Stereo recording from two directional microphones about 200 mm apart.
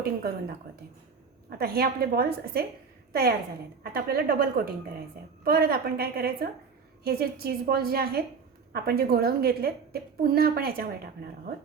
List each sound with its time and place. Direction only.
0.0 s a woman's voice: 50° right (ahead or behind)
1.5 s a woman's voice: 50° right (ahead or behind)